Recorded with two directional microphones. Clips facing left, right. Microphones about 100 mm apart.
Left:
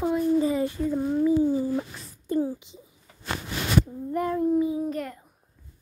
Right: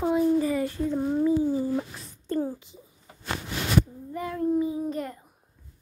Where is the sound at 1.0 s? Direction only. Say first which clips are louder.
Even; 10° right (ahead or behind).